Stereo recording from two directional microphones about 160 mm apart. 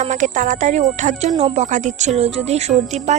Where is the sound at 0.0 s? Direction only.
50° right (ahead or behind).